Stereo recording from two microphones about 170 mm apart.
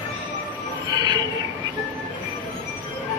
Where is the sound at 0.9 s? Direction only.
25° right (ahead or behind).